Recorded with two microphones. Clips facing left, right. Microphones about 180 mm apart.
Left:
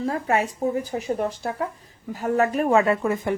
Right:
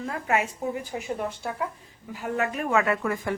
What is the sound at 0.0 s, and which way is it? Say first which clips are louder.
A woman's voice: left 4 dB; 35° left (ahead or behind).